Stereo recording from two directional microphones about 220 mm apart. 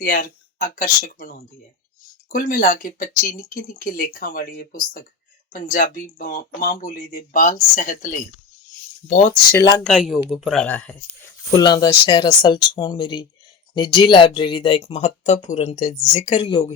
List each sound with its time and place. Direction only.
0.0 s speech: 40° left (ahead or behind)
9.5 s speech: 15° left (ahead or behind)
9.8 s speech: centre (ahead or behind)
11.5 s speech: 20° left (ahead or behind)